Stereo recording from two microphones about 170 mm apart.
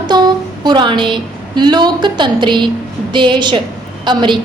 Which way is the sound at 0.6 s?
25° right (ahead or behind).